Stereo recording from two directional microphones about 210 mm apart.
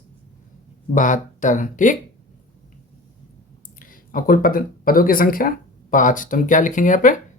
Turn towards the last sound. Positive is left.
turn(degrees=40)  # may be behind; listen again after turning